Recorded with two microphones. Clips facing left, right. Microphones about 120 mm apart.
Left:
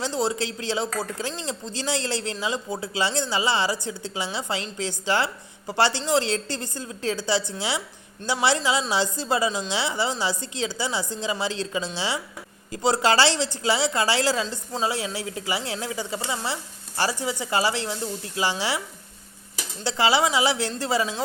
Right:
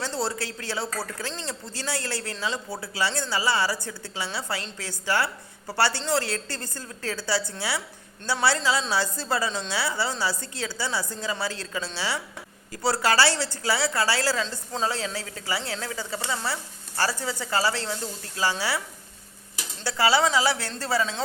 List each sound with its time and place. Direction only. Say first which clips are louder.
0.0 s speech: left 4 dB; 15° left (ahead or behind)
14.7 s speech: left 1 dB; 5° left (ahead or behind)
19.8 s speech: left 1 dB; 20° left (ahead or behind)